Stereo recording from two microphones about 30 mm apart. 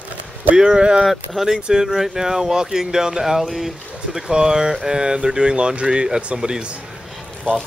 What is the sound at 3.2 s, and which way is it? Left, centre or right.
Speech, centre.